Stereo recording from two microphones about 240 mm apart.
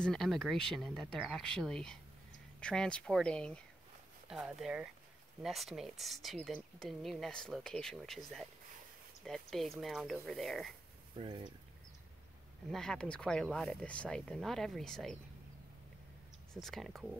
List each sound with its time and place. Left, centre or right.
0.0 s speech: centre
9.2 s speech: centre
11.1 s speech: centre
12.7 s speech: centre
16.5 s speech: centre